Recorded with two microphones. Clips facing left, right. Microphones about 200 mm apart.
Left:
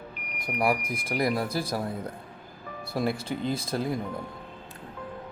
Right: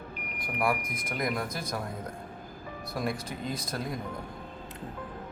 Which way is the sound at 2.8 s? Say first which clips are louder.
Left 4 dB; 30° left (ahead or behind).